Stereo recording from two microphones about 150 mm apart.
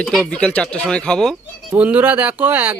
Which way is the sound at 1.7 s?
10° right (ahead or behind).